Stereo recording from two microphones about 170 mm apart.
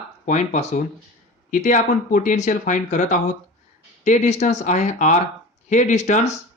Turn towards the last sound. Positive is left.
turn(degrees=45)  # may be behind; listen again after turning